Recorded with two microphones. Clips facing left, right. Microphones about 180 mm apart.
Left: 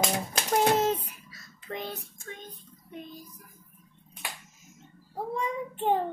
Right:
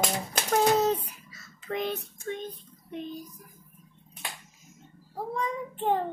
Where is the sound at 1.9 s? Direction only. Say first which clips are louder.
Right 7 dB; 20° right (ahead or behind).